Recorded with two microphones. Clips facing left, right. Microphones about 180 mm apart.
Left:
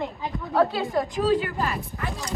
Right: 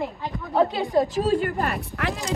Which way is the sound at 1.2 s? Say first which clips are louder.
Even; 45° right (ahead or behind).